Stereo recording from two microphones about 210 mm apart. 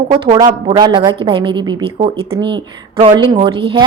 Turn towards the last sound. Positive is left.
turn(degrees=-25)  # may be behind; listen again after turning